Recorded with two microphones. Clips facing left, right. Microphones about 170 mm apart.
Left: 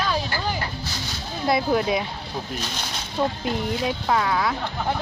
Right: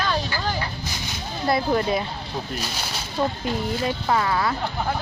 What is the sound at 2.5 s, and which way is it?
Speech, 10° right (ahead or behind).